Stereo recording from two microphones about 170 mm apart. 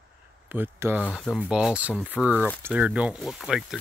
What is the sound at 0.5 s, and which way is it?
Speech, 10° right (ahead or behind).